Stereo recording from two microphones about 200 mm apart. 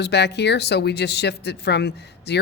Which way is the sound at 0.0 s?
55° left (ahead or behind).